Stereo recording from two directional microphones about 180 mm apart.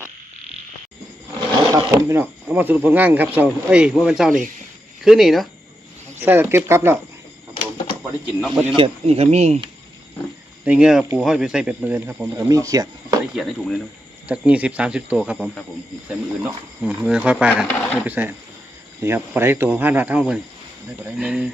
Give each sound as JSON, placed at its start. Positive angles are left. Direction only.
{"t": 1.7, "sound": "speech", "side_deg": -20}
{"t": 6.1, "sound": "speech", "side_deg": -10}
{"t": 8.4, "sound": "speech", "side_deg": -5}
{"t": 8.7, "sound": "speech", "side_deg": -30}
{"t": 10.6, "sound": "speech", "side_deg": -5}
{"t": 13.3, "sound": "speech", "side_deg": 0}